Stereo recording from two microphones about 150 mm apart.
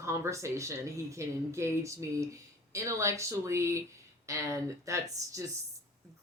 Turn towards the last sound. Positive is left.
turn(degrees=-20)  # may be behind; listen again after turning